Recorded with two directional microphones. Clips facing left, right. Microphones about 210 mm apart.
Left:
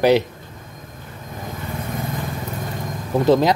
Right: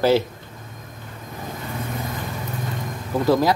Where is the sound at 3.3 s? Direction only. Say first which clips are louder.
Left 3 dB; 20° left (ahead or behind).